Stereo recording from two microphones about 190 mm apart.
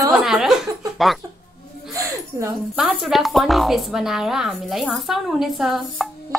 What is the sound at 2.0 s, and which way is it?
Speech, 15° right (ahead or behind).